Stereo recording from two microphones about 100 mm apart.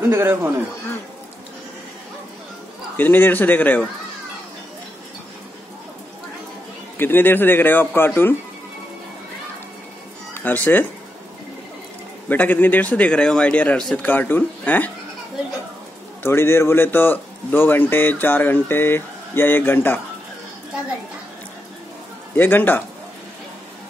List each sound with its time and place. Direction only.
0.0 s a man's voice: 25° right (ahead or behind)
3.0 s a man's voice: 20° left (ahead or behind)
7.0 s a man's voice: 20° left (ahead or behind)
10.3 s speech: 15° left (ahead or behind)
12.3 s speech: 20° left (ahead or behind)
16.2 s a man's voice: 25° left (ahead or behind)
22.3 s a man's voice: 20° left (ahead or behind)